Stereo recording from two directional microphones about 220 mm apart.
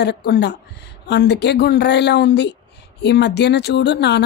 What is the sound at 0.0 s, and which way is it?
Speech, 50° left (ahead or behind).